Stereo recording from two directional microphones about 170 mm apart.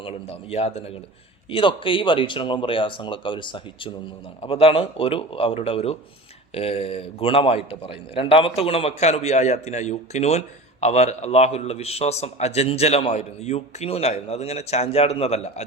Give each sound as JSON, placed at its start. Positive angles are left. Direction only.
{"t": 0.0, "sound": "a man's voice", "side_deg": 35}